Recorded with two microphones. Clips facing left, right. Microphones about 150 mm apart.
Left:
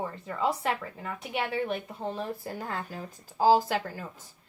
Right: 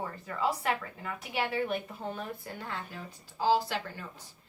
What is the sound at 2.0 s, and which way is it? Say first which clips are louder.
Speech: left 4 dB; 30° left (ahead or behind).